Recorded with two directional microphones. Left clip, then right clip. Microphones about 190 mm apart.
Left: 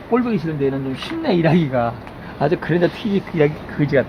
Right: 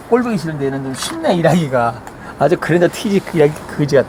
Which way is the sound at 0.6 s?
35° right (ahead or behind).